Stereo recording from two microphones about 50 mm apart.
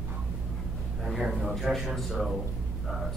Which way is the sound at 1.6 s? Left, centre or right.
Centre.